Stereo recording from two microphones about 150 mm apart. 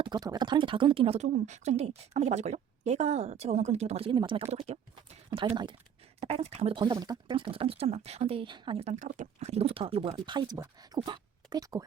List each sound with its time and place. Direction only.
0.0 s speech: 25° right (ahead or behind)
1.3 s a woman's voice: 50° right (ahead or behind)
5.3 s speech: 35° right (ahead or behind)
6.1 s a woman's voice: 45° right (ahead or behind); by 11.9 s 25° right (ahead or behind)